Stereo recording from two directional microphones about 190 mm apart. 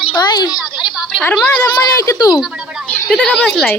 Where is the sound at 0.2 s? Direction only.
20° left (ahead or behind).